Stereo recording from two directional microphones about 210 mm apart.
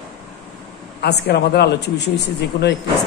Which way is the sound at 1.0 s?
50° left (ahead or behind).